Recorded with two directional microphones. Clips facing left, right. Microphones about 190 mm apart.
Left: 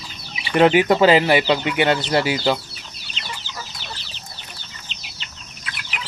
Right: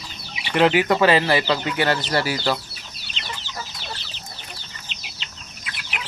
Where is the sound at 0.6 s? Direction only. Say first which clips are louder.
Left 3 dB; 25° left (ahead or behind).